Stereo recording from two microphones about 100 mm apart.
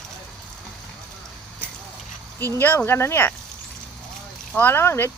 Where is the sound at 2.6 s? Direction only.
20° left (ahead or behind).